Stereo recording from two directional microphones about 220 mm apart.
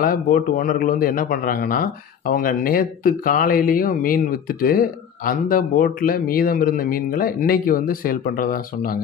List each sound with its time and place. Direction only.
0.0 s a man's voice: 40° left (ahead or behind)